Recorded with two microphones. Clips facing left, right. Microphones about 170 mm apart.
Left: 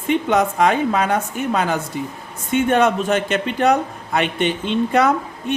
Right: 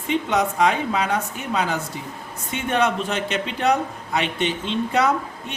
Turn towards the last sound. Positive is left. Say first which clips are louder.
# left 4 dB
turn(degrees=55)  # may be behind; listen again after turning